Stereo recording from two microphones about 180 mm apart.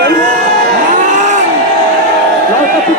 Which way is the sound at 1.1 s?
45° right (ahead or behind).